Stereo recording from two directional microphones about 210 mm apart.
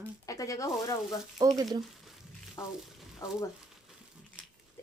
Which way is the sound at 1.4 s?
20° right (ahead or behind).